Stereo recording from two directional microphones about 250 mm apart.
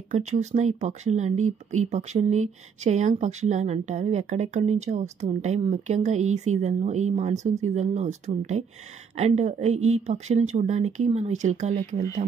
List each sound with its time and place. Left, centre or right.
0.1 s speech: right